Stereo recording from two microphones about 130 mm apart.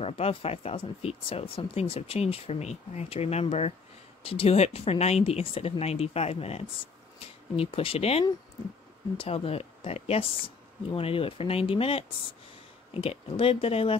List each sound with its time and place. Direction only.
0.0 s speech: 50° left (ahead or behind)